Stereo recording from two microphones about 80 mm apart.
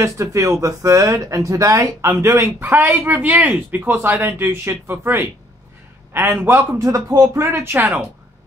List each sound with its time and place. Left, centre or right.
0.0 s speech: right
6.8 s speech: right